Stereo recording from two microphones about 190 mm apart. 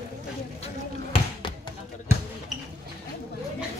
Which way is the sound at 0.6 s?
25° left (ahead or behind).